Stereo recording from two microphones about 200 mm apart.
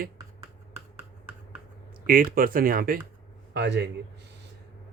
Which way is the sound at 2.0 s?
45° right (ahead or behind).